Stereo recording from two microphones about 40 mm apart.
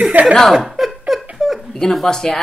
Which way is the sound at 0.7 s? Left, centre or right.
Centre.